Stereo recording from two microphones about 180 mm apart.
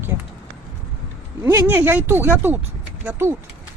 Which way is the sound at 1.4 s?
10° right (ahead or behind).